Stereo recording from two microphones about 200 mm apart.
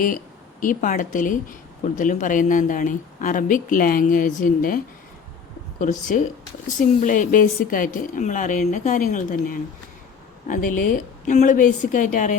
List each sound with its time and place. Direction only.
0.6 s speech: 40° left (ahead or behind)
5.8 s speech: 40° left (ahead or behind)